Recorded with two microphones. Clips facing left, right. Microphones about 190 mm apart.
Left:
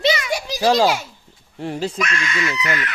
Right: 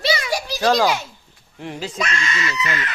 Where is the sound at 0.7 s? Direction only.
5° left (ahead or behind).